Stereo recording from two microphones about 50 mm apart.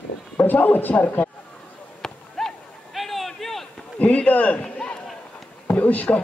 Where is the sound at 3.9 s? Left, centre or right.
Left.